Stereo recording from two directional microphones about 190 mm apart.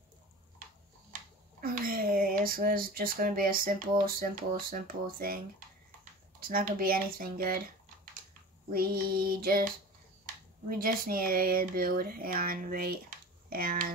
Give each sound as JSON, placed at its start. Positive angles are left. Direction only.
{"t": 1.6, "sound": "speech", "side_deg": -50}
{"t": 6.4, "sound": "speech", "side_deg": -50}
{"t": 10.7, "sound": "speech", "side_deg": -50}